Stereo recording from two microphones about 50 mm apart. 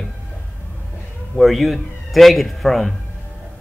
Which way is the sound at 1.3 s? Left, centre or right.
Centre.